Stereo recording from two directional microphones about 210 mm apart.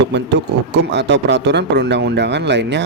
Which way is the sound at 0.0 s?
55° right (ahead or behind).